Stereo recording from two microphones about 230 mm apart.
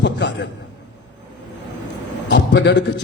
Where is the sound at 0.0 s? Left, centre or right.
Left.